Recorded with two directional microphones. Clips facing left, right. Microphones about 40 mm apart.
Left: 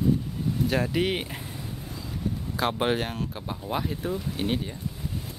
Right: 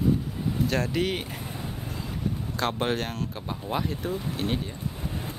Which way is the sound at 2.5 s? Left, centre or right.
Centre.